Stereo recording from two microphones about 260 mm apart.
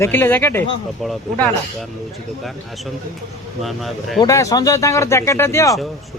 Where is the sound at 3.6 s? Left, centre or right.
Centre.